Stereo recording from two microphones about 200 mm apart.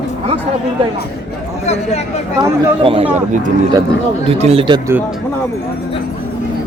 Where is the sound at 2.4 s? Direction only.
25° right (ahead or behind).